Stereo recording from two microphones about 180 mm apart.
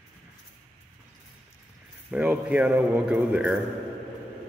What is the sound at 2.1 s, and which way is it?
Speech, 5° right (ahead or behind).